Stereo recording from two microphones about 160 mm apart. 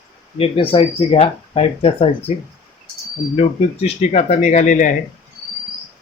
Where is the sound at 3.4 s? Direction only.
40° left (ahead or behind).